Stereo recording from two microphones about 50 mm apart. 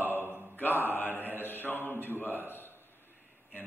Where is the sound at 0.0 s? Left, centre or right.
Right.